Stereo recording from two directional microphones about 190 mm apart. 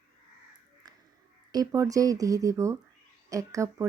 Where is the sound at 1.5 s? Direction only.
20° right (ahead or behind).